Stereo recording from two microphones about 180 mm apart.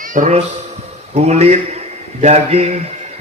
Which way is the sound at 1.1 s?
35° right (ahead or behind).